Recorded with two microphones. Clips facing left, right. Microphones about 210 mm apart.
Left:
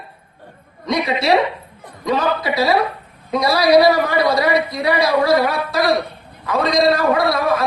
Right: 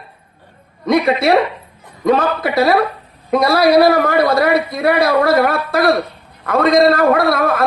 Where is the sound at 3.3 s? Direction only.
55° right (ahead or behind).